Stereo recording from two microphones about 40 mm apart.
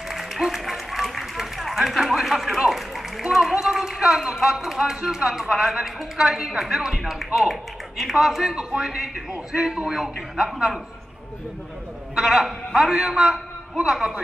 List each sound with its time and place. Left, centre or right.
0.1 s music: centre
2.6 s a man's voice: centre
12.2 s a man's voice: centre